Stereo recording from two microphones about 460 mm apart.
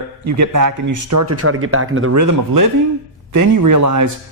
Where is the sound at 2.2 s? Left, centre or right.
Right.